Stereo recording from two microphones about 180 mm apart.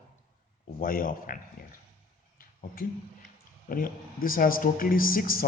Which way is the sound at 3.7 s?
50° left (ahead or behind).